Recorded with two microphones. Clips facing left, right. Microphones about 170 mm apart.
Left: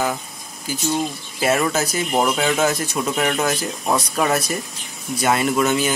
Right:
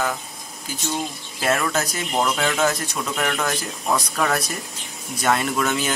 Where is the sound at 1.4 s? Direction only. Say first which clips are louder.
Left 3 dB; 5° left (ahead or behind).